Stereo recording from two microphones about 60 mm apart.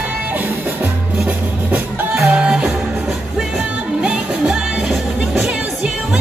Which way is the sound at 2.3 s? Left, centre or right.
Centre.